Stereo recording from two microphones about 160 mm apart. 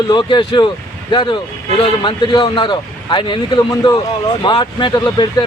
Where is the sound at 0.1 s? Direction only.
30° left (ahead or behind).